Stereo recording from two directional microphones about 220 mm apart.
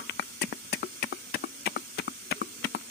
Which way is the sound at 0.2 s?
45° left (ahead or behind).